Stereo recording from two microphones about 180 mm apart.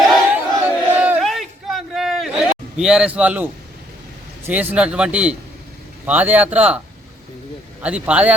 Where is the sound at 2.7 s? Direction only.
5° right (ahead or behind).